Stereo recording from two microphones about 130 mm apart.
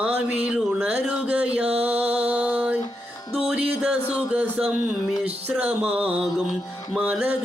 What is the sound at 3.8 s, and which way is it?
Music, 10° right (ahead or behind).